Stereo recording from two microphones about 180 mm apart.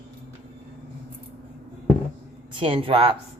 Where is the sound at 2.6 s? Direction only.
30° right (ahead or behind).